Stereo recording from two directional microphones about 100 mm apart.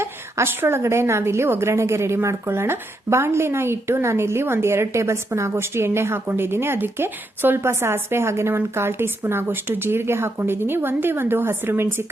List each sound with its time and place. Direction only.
0.0 s a woman's voice: 25° right (ahead or behind)